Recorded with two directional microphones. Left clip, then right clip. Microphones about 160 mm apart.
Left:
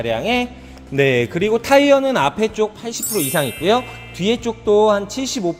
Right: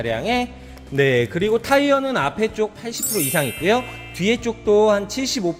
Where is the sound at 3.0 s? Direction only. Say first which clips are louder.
Left 2 dB; centre (ahead or behind).